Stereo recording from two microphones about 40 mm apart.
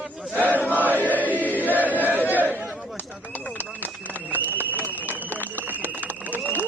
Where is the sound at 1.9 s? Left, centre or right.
Right.